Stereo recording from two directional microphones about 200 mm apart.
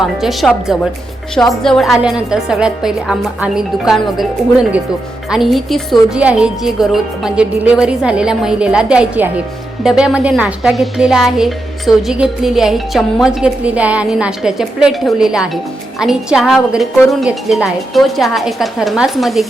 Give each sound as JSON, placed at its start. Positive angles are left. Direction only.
{"t": 0.0, "sound": "speech", "side_deg": 0}
{"t": 5.3, "sound": "speech", "side_deg": 0}